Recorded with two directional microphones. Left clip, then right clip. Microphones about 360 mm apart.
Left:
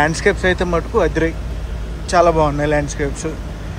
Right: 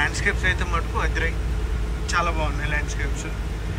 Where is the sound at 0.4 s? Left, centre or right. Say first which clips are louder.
Left 7 dB; centre.